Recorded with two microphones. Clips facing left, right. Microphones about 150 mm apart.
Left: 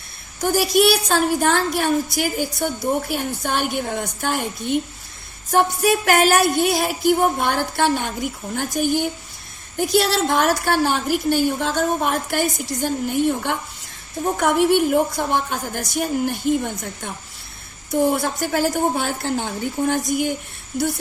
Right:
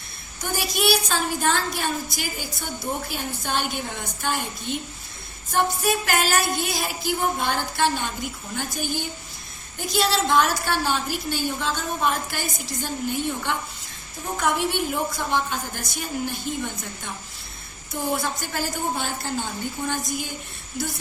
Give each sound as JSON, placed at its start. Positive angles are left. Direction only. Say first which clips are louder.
{"t": 0.7, "sound": "a woman's voice", "louder": "left 5 dB", "side_deg": 55}